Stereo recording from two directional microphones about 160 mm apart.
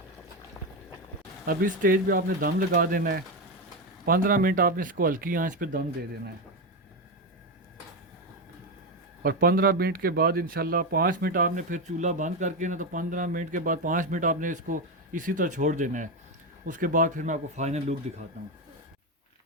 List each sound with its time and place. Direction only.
1.5 s speech: 60° right (ahead or behind)
9.2 s speech: 65° right (ahead or behind); by 17.9 s 45° right (ahead or behind)